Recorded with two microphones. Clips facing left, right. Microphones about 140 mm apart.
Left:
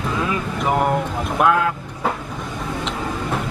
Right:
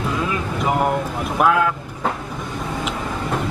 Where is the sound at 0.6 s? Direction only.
Centre (ahead or behind).